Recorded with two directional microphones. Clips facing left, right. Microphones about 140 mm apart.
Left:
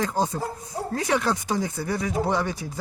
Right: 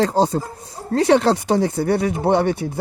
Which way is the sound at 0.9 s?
70° right (ahead or behind).